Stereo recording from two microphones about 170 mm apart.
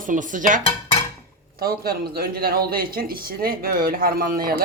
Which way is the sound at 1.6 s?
65° right (ahead or behind).